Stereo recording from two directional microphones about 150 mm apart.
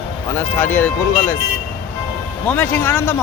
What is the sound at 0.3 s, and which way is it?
Speech, 10° left (ahead or behind).